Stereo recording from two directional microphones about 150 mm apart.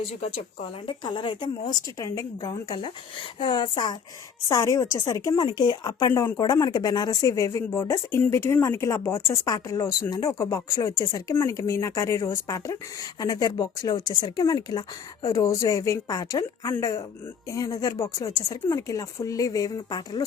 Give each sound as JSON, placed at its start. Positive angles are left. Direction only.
{"t": 0.1, "sound": "speech", "side_deg": 45}
{"t": 0.9, "sound": "speech", "side_deg": 30}
{"t": 4.4, "sound": "speech", "side_deg": 20}